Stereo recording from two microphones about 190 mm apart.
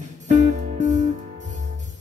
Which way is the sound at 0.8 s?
40° right (ahead or behind).